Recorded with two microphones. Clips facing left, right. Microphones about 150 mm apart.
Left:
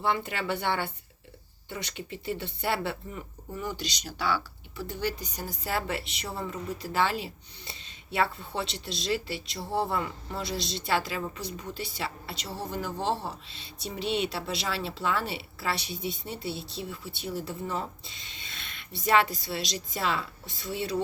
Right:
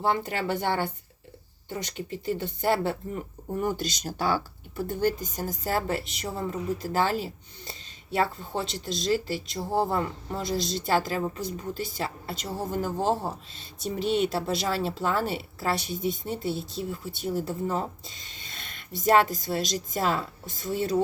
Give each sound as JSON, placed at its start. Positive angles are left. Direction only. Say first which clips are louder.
{"t": 0.0, "sound": "a woman's voice", "louder": "right 3 dB", "side_deg": -40}